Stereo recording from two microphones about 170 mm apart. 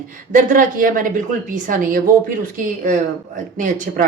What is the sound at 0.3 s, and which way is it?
A woman's voice, 50° right (ahead or behind).